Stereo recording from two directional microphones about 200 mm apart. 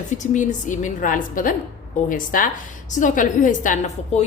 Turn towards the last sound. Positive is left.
turn(degrees=35)  # may be behind; listen again after turning